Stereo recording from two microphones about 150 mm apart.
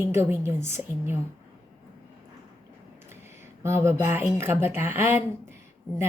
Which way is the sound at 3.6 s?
15° right (ahead or behind).